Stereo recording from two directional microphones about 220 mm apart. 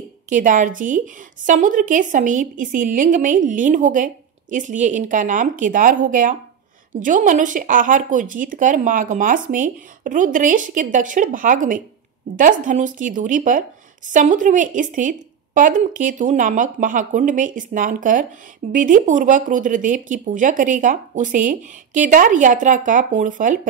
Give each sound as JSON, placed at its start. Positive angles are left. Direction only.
{"t": 0.3, "sound": "a woman's voice", "side_deg": -35}